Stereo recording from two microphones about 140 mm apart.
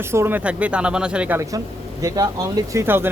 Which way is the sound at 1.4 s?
25° right (ahead or behind).